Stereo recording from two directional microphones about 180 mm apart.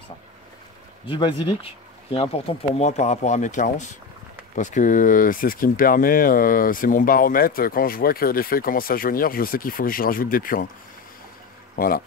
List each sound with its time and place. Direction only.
1.0 s speech: 30° left (ahead or behind); by 10.7 s 50° left (ahead or behind)
11.7 s speech: 55° left (ahead or behind)